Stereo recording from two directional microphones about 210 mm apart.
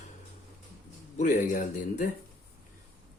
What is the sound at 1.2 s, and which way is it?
Speech, 35° left (ahead or behind).